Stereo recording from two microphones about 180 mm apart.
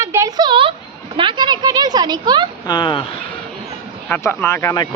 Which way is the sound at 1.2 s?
25° right (ahead or behind).